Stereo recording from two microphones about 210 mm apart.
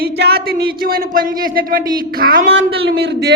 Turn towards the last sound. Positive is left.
turn(degrees=-55)  # may be behind; listen again after turning